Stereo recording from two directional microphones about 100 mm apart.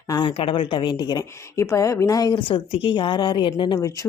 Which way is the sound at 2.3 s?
60° left (ahead or behind).